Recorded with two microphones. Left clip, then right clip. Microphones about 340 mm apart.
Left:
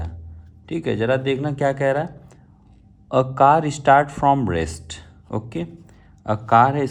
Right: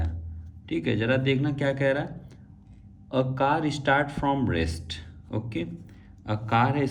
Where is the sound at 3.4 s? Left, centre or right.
Centre.